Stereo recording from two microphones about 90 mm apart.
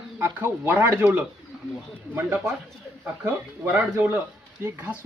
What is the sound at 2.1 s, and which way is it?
Speech, 25° right (ahead or behind).